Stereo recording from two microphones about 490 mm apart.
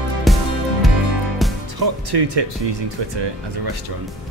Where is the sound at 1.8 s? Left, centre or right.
Right.